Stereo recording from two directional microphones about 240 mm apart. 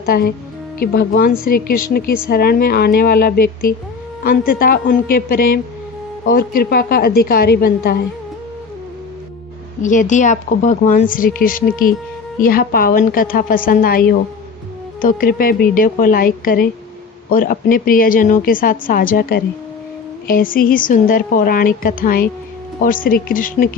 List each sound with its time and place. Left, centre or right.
0.0 s speech: left
9.8 s speech: left